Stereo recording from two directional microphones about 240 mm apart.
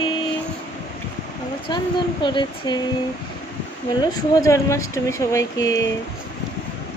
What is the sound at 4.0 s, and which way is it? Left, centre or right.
Speech, centre.